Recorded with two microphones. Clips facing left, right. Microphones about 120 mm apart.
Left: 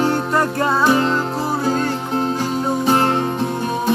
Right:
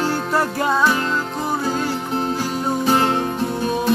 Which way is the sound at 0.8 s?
25° left (ahead or behind).